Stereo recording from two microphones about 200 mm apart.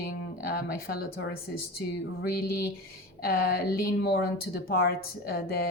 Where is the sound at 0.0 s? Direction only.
50° left (ahead or behind).